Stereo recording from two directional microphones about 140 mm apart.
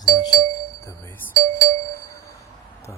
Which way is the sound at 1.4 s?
90° right.